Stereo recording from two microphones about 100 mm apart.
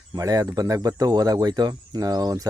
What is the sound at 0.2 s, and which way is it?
Speech, 40° right (ahead or behind).